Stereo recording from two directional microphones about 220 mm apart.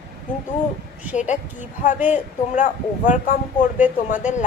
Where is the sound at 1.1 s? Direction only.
35° left (ahead or behind).